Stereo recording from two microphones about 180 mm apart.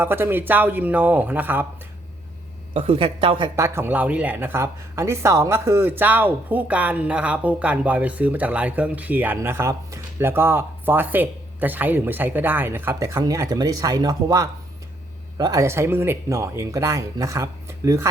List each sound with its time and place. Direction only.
0.0 s speech: 10° right (ahead or behind)
2.7 s speech: 30° right (ahead or behind)
3.5 s speech: 15° right (ahead or behind)